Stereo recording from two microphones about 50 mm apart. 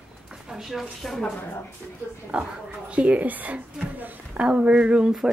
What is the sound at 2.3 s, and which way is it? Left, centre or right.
Speech, centre.